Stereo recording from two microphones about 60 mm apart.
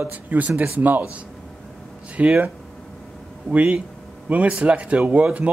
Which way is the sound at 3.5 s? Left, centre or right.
Right.